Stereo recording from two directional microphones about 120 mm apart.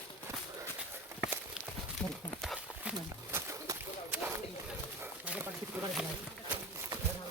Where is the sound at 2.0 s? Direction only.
10° left (ahead or behind).